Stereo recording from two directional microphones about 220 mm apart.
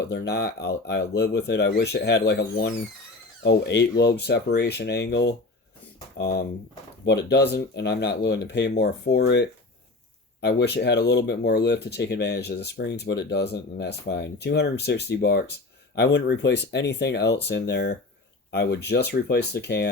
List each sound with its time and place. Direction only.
0.0 s speech: 50° left (ahead or behind)